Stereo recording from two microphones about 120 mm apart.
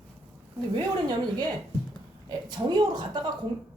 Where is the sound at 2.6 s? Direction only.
35° right (ahead or behind).